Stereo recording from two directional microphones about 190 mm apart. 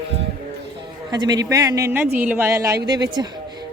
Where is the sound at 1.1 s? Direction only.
20° right (ahead or behind).